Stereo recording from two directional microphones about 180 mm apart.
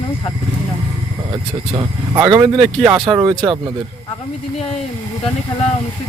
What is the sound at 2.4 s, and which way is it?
Speech, 30° right (ahead or behind).